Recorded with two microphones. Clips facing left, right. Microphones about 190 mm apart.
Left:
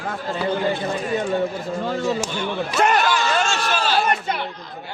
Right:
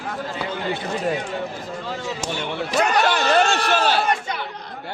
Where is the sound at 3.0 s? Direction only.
60° right (ahead or behind).